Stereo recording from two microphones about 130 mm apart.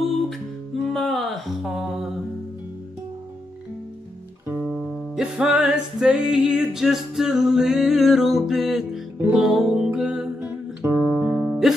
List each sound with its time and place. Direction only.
0.8 s a sound: centre (ahead or behind)
4.6 s music: 5° right (ahead or behind)
10.4 s music: 20° right (ahead or behind)
11.1 s music: 10° right (ahead or behind)